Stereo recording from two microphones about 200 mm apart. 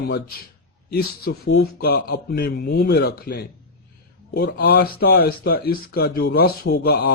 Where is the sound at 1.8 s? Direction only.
50° left (ahead or behind).